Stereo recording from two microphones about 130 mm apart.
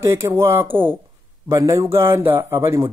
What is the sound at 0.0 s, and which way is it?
A man's voice, 20° right (ahead or behind).